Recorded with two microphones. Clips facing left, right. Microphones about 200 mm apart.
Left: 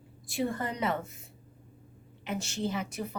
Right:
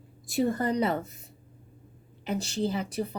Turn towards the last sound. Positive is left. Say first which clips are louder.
# right 4 dB
turn(degrees=-35)  # may be behind; listen again after turning